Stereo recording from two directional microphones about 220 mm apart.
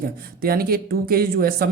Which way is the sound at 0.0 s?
40° right (ahead or behind).